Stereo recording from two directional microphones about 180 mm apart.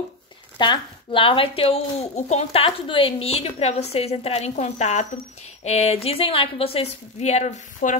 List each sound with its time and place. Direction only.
0.6 s a child's voice: 25° left (ahead or behind)